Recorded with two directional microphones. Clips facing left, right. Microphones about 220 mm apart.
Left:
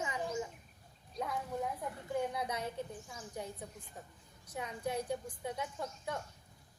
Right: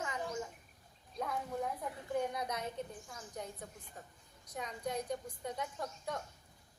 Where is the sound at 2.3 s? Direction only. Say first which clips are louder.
Left 1 dB; 10° left (ahead or behind).